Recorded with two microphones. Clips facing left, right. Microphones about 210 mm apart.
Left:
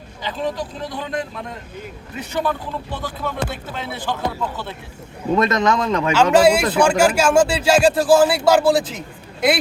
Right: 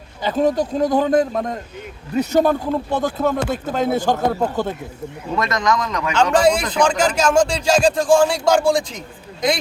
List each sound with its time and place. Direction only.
0.2 s speech: 45° right (ahead or behind)
5.4 s speech: 25° left (ahead or behind)
6.3 s speech: 5° left (ahead or behind)